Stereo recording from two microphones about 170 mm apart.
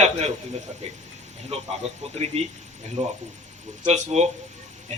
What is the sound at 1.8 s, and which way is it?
Speech, 40° right (ahead or behind).